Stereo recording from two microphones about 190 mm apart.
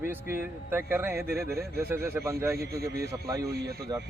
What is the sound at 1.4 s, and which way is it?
Speech, 55° right (ahead or behind).